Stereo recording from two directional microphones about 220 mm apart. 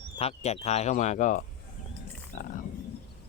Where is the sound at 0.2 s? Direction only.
30° left (ahead or behind).